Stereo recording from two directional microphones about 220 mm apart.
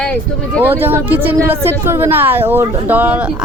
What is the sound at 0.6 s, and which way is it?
Speech, 10° right (ahead or behind).